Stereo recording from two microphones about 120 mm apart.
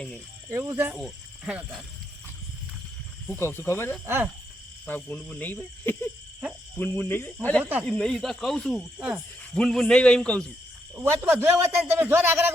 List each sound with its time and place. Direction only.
0.5 s a man's voice: 20° right (ahead or behind)
1.5 s speech: 10° right (ahead or behind)
3.3 s speech: 20° left (ahead or behind)
4.0 s a man's voice: 20° right (ahead or behind)
4.9 s speech: 15° left (ahead or behind)
7.6 s speech: 15° right (ahead or behind)
7.9 s speech: 5° left (ahead or behind)
10.9 s a man's voice: 15° right (ahead or behind)